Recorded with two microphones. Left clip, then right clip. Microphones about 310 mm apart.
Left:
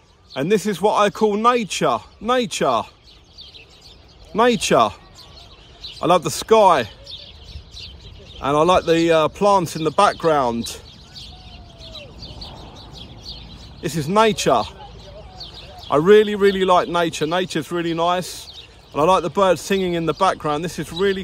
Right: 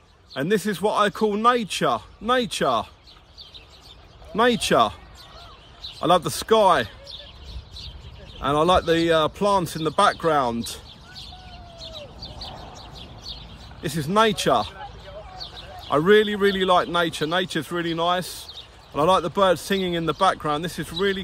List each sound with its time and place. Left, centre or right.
0.3 s a man's voice: centre
4.4 s a man's voice: centre
5.9 s a man's voice: centre
8.4 s a man's voice: centre
12.4 s bird: right
13.8 s a man's voice: centre
15.9 s a man's voice: centre